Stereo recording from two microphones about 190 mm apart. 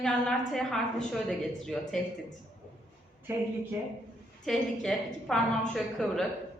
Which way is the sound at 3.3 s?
15° right (ahead or behind).